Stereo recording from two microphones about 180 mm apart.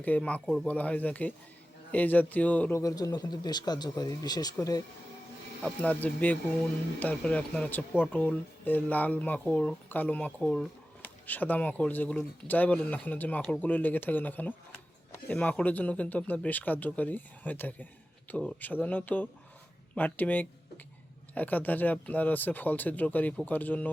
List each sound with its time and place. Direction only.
0.0 s speech: 10° left (ahead or behind)
5.6 s speech: 10° left (ahead or behind)